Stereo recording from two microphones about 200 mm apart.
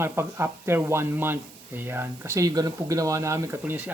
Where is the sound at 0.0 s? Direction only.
10° right (ahead or behind).